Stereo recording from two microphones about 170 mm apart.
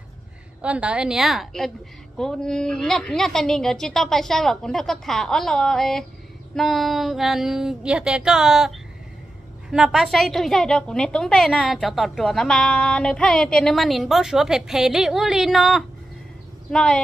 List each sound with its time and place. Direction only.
0.6 s a woman's voice: 10° right (ahead or behind)